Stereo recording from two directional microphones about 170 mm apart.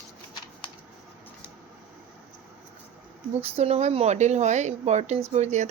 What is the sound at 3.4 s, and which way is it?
Speech, 35° right (ahead or behind).